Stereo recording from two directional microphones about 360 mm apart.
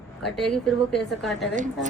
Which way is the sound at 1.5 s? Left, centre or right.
Right.